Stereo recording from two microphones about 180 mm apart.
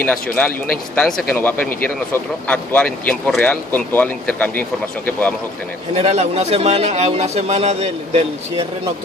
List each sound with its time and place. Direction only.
0.0 s a man's voice: 10° left (ahead or behind)
5.9 s speech: 35° right (ahead or behind)